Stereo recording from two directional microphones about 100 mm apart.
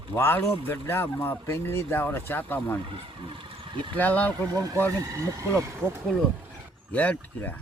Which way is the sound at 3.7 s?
55° right (ahead or behind).